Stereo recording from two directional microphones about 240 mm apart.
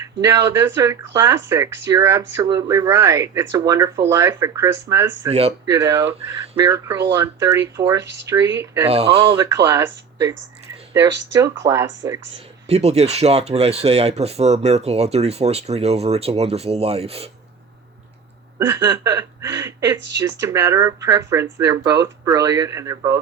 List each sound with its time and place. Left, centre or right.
0.0 s speech: centre
5.3 s speech: right
5.6 s speech: centre
8.0 s speech: right
8.3 s speech: centre
8.9 s speech: right
12.6 s speech: right
18.6 s speech: centre